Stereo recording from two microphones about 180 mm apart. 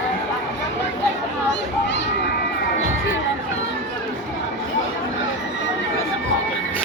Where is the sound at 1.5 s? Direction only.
75° left (ahead or behind).